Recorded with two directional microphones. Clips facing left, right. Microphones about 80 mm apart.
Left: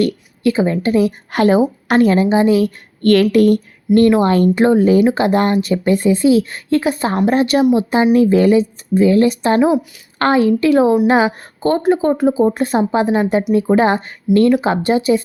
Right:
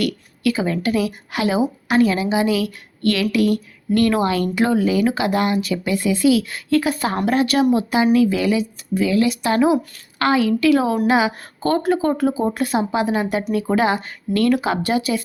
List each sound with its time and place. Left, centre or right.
0.0 s speech: left
11.6 s speech: left
14.3 s speech: centre
14.6 s speech: left